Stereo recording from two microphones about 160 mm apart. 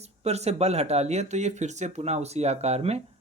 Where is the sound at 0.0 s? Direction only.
40° right (ahead or behind).